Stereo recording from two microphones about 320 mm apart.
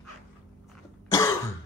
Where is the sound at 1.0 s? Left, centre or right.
Centre.